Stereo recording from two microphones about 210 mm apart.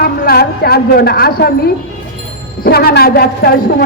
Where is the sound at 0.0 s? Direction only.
50° left (ahead or behind).